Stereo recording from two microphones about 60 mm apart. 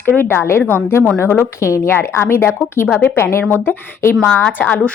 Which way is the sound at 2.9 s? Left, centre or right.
Left.